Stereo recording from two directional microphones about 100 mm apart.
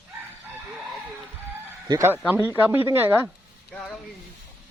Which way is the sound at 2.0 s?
20° right (ahead or behind).